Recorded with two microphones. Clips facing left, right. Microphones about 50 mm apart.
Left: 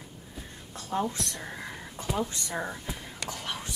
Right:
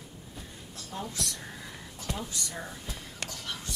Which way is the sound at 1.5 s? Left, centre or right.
Left.